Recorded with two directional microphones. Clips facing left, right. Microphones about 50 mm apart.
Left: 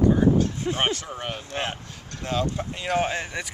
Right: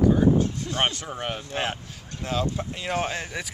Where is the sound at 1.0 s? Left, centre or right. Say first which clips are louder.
Right 1 dB; centre.